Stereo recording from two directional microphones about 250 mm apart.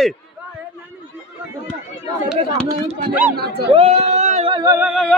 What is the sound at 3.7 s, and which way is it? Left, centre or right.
Speech, right.